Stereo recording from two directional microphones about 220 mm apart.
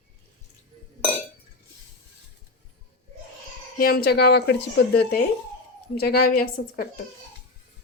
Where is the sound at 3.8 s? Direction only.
45° left (ahead or behind).